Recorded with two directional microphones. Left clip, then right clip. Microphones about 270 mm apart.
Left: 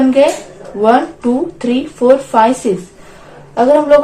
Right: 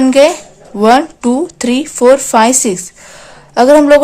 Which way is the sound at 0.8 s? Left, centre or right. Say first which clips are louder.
Right 2 dB; right.